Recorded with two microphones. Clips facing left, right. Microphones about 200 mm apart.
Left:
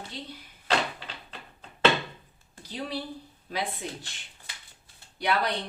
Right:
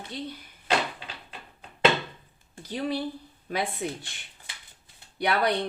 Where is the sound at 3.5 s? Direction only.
55° right (ahead or behind).